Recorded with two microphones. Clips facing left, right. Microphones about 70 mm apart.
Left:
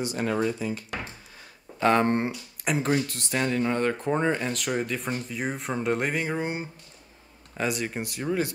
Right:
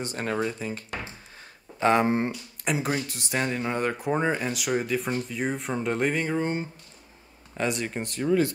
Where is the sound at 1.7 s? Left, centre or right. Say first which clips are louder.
Even; centre.